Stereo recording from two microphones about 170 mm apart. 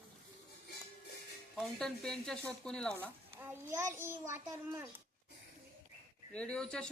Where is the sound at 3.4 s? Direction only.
15° right (ahead or behind).